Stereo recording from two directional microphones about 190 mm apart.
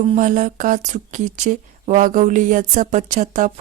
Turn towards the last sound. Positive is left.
turn(degrees=-40)  # may be behind; listen again after turning